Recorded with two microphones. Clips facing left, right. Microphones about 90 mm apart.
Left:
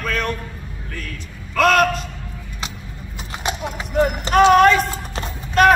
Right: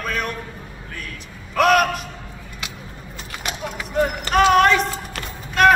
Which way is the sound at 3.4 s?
25° left (ahead or behind).